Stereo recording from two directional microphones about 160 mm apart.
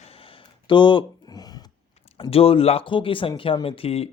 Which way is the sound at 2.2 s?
35° left (ahead or behind).